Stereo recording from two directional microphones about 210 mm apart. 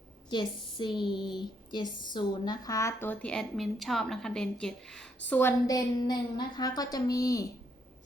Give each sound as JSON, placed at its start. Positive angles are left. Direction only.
{"t": 0.3, "sound": "a woman's voice", "side_deg": 20}